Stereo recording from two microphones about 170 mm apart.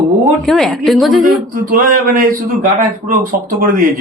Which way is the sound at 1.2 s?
55° right (ahead or behind).